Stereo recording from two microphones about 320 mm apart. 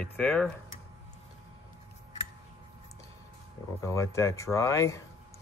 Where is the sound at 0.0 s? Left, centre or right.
Centre.